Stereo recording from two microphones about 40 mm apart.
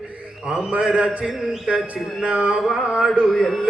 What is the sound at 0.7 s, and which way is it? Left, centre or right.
Mantra, right.